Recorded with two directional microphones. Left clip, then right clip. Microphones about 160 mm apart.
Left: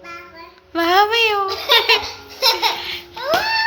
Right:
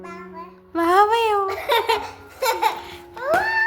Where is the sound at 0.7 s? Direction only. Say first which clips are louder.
Left 1 dB; 30° right (ahead or behind).